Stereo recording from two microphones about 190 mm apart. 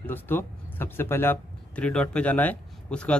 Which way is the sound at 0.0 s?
10° left (ahead or behind).